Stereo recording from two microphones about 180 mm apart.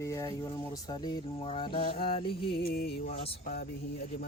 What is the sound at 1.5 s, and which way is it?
Mantra, 30° left (ahead or behind).